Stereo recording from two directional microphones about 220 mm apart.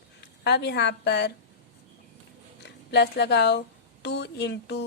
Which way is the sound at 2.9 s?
50° left (ahead or behind).